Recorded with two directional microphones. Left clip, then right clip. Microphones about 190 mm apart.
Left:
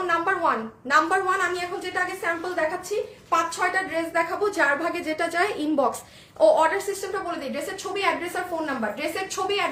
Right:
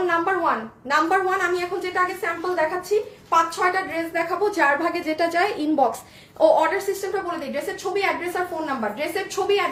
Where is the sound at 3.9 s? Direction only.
15° left (ahead or behind).